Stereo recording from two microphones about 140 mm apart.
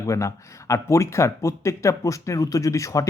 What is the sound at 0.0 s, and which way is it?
Speech, 20° left (ahead or behind).